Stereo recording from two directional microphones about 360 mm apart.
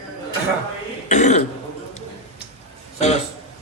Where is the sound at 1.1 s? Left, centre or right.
Centre.